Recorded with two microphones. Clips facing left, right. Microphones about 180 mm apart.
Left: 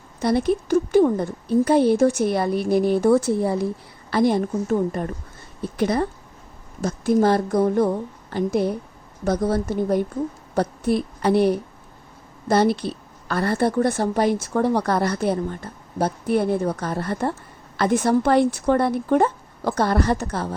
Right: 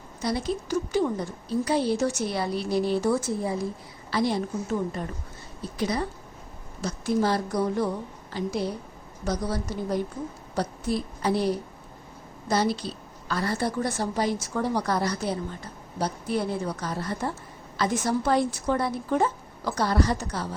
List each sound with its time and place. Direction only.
0.2 s a woman's voice: 60° left (ahead or behind)
4.1 s a woman's voice: 50° left (ahead or behind)